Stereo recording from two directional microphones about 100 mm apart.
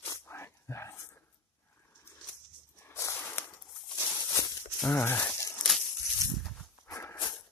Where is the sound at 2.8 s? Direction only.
30° left (ahead or behind).